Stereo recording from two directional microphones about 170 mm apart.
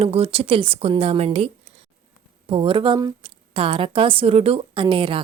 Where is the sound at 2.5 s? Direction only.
30° right (ahead or behind).